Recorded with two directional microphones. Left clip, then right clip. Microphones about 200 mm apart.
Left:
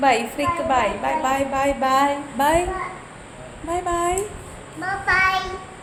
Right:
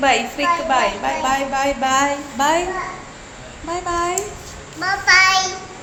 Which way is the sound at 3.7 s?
20° left (ahead or behind).